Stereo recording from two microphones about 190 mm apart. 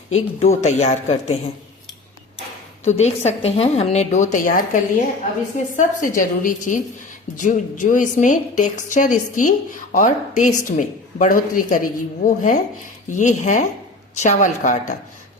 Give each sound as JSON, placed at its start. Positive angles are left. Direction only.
{"t": 0.1, "sound": "a woman's voice", "side_deg": 35}
{"t": 2.8, "sound": "a woman's voice", "side_deg": 35}